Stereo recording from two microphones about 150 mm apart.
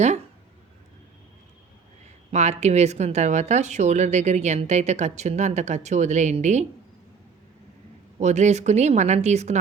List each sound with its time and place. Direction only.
2.3 s speech: 50° right (ahead or behind)
8.2 s speech: 50° right (ahead or behind)